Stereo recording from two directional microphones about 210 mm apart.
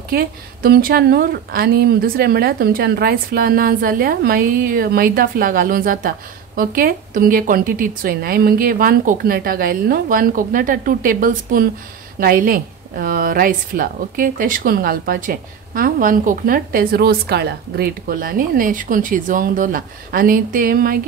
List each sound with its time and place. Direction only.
0.1 s speech: 45° right (ahead or behind)